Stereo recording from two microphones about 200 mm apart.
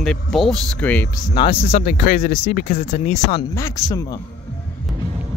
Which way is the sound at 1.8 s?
45° left (ahead or behind).